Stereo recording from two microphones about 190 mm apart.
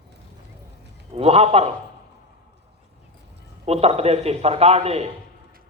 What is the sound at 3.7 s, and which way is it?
A man's voice, 35° right (ahead or behind).